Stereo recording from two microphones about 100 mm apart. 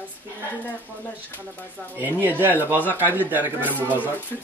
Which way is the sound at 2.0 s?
20° right (ahead or behind).